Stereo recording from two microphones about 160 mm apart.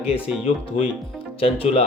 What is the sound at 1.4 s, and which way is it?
Speech, 40° left (ahead or behind).